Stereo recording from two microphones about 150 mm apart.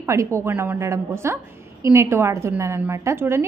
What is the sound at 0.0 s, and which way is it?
A woman's voice, 20° right (ahead or behind).